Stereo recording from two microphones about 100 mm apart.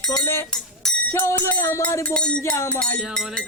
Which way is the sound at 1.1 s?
25° left (ahead or behind).